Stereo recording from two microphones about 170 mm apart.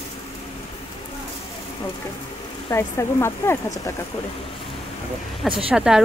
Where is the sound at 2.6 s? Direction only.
15° left (ahead or behind).